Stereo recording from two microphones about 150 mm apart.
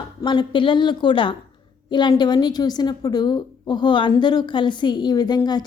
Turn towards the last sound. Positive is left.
turn(degrees=30)  # may be behind; listen again after turning